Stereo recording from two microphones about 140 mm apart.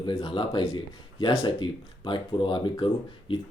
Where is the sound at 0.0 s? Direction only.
35° left (ahead or behind).